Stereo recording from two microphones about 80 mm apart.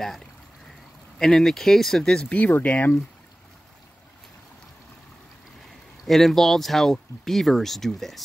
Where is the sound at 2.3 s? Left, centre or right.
Left.